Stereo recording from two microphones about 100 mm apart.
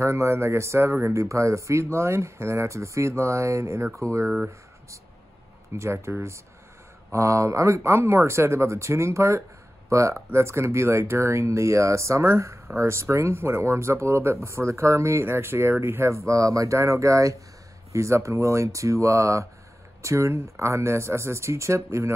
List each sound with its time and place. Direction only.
0.0 s speech: 30° right (ahead or behind)
5.8 s speech: 25° right (ahead or behind)